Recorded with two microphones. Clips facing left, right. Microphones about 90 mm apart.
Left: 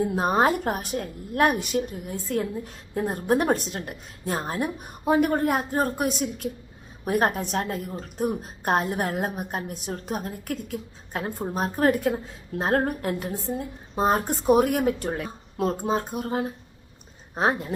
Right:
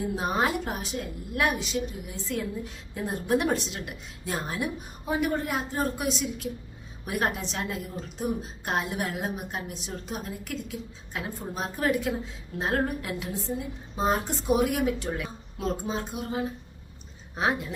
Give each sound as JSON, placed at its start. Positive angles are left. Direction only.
{"t": 0.2, "sound": "a woman's voice", "side_deg": 40}